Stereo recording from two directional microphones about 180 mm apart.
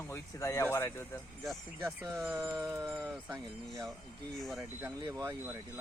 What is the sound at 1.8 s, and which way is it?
Speech, 20° right (ahead or behind).